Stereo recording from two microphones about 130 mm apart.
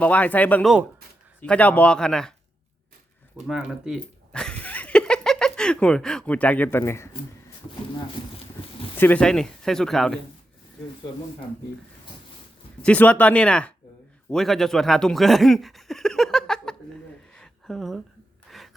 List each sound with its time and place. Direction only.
0.0 s speech: 10° left (ahead or behind)
3.4 s speech: 5° right (ahead or behind)
4.3 s a sound: 5° left (ahead or behind)
9.0 s speech: 10° left (ahead or behind)
12.8 s speech: 10° left (ahead or behind)
17.3 s a sound: 5° left (ahead or behind)